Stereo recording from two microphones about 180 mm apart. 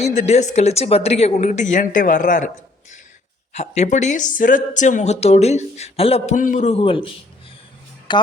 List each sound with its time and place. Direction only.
0.0 s speech: 40° left (ahead or behind)
3.5 s speech: 40° left (ahead or behind)
8.1 s speech: 25° left (ahead or behind)